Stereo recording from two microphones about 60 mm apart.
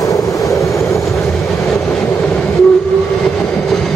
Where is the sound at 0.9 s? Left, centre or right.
Left.